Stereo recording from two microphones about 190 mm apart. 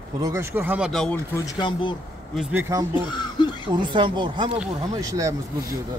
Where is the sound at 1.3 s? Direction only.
15° left (ahead or behind).